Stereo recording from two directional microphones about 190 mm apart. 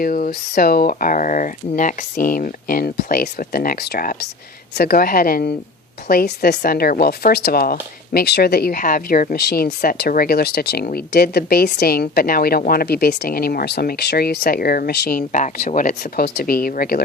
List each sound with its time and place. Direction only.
0.0 s a woman's voice: 45° left (ahead or behind)